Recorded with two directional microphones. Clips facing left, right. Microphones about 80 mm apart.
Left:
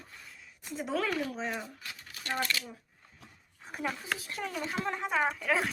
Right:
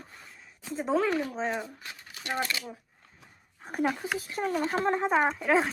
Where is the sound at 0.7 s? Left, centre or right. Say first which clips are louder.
Right 5 dB; right.